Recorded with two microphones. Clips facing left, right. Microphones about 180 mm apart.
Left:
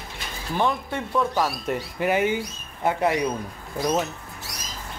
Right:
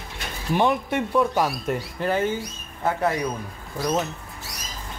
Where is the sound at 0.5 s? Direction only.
15° right (ahead or behind).